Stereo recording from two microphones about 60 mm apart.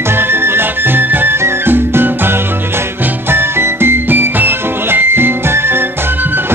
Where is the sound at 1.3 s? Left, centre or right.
Right.